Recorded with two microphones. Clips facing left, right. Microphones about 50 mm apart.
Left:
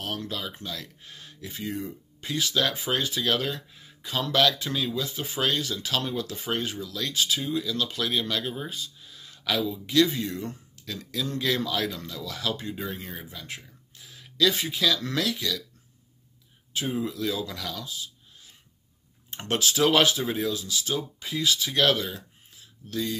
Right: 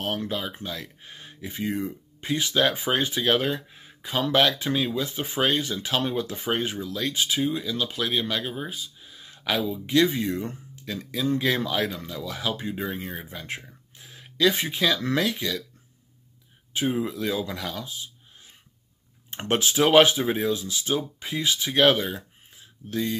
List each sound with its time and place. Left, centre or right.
0.0 s speech: right
16.7 s speech: right
19.4 s speech: right